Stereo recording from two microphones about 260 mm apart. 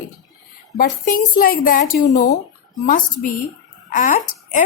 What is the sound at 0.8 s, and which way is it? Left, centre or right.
A woman's voice, left.